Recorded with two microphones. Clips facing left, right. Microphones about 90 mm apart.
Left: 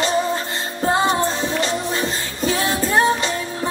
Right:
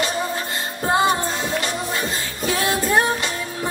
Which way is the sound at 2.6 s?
25° left (ahead or behind).